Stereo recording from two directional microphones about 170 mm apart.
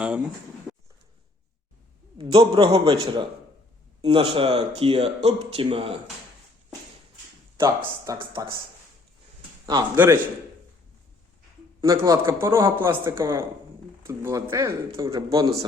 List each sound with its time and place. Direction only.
0.0 s speech: 5° right (ahead or behind)
2.1 s speech: 30° right (ahead or behind)
7.8 s speech: 20° right (ahead or behind)
9.6 s speech: 25° right (ahead or behind)
11.8 s a man's voice: 20° right (ahead or behind)